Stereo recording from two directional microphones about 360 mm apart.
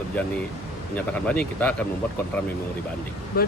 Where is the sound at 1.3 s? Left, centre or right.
Centre.